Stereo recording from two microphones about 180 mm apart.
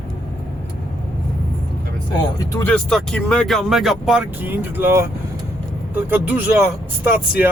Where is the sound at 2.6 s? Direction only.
5° left (ahead or behind); by 5.0 s 15° right (ahead or behind).